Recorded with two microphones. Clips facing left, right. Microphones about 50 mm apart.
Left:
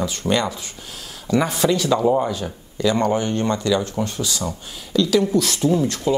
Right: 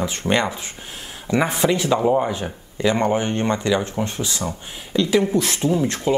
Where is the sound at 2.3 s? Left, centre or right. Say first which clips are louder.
Even; right.